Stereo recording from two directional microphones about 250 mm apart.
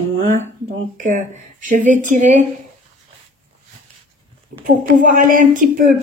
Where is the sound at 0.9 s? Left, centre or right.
Right.